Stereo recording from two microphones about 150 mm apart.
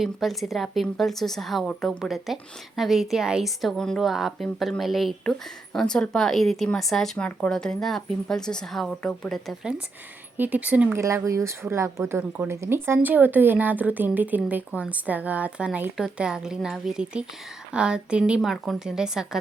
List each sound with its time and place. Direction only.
0.0 s a woman's voice: centre (ahead or behind)
10.3 s a woman's voice: 10° right (ahead or behind)